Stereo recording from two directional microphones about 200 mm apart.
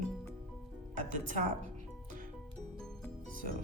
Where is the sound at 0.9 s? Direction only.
40° right (ahead or behind).